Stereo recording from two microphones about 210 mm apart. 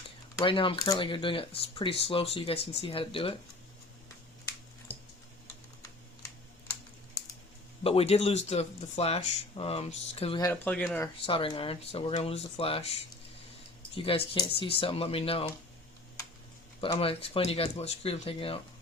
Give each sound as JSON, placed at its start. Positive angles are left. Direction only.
{"t": 0.3, "sound": "speech", "side_deg": 25}
{"t": 4.9, "sound": "typing", "side_deg": 25}
{"t": 7.9, "sound": "speech", "side_deg": 30}
{"t": 10.4, "sound": "speech", "side_deg": 10}
{"t": 11.3, "sound": "speech", "side_deg": 25}
{"t": 16.8, "sound": "speech", "side_deg": 25}